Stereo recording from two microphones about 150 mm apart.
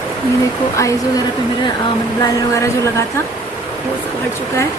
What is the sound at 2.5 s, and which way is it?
Speech, 20° left (ahead or behind).